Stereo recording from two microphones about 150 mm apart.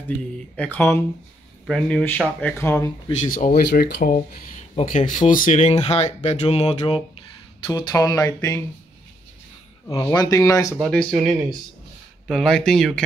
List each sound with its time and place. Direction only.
0.6 s speech: 10° left (ahead or behind)
3.2 s speech: 65° left (ahead or behind)
4.6 s speech: 55° left (ahead or behind); by 8.6 s 25° left (ahead or behind)
9.8 s speech: 25° left (ahead or behind)
10.8 s speech: 5° left (ahead or behind)
12.3 s speech: 5° left (ahead or behind)